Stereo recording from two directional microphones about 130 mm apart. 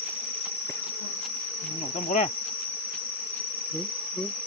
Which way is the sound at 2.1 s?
75° left (ahead or behind).